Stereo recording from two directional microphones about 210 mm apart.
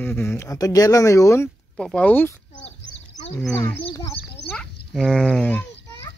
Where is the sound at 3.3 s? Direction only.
10° left (ahead or behind).